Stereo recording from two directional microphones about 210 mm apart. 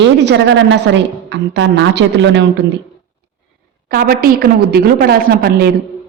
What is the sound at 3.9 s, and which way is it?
A woman's voice, 45° right (ahead or behind).